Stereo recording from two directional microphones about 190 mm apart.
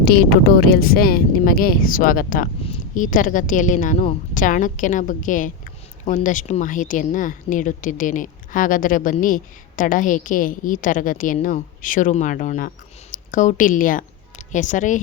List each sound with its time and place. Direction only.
0.0 s a woman's voice: 55° left (ahead or behind)